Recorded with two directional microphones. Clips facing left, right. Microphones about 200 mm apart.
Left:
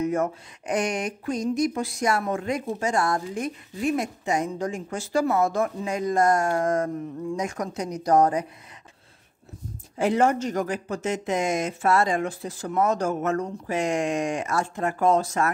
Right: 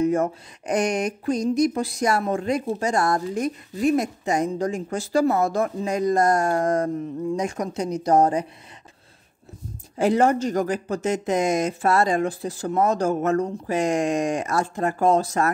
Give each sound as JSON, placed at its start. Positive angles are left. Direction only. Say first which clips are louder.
{"t": 0.0, "sound": "a woman's voice", "louder": "right 4 dB", "side_deg": -30}
{"t": 9.9, "sound": "speech", "louder": "right 2 dB", "side_deg": -35}